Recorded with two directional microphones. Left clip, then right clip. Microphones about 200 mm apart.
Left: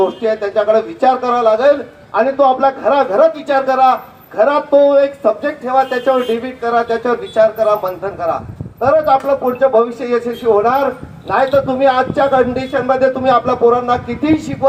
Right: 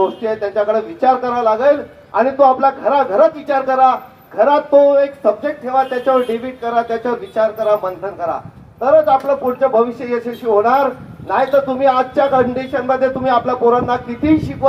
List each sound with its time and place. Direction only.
0.0 s a man's voice: 20° left (ahead or behind)